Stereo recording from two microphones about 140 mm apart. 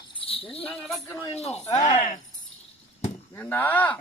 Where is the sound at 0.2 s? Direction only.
40° left (ahead or behind).